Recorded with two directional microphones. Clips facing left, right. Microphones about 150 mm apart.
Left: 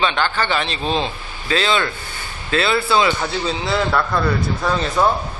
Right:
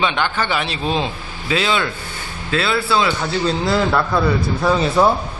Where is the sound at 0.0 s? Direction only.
15° right (ahead or behind).